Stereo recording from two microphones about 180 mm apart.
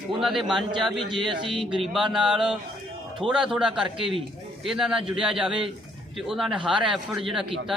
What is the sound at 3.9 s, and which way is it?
Speech, 30° right (ahead or behind).